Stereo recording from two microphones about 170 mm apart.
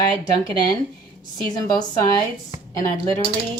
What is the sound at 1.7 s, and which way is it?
Speech, 25° left (ahead or behind).